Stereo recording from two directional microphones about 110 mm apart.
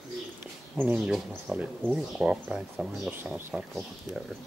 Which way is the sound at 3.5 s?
20° right (ahead or behind).